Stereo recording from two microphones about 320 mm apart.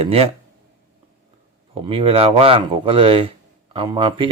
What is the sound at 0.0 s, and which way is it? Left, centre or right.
Speech, centre.